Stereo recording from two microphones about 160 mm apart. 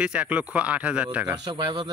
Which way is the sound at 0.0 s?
5° right (ahead or behind).